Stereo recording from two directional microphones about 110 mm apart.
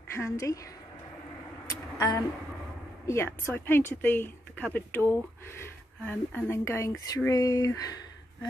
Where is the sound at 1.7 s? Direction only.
30° left (ahead or behind).